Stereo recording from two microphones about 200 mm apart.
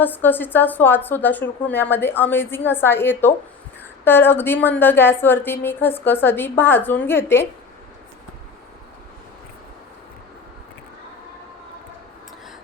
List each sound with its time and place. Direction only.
0.0 s a woman's voice: 10° left (ahead or behind)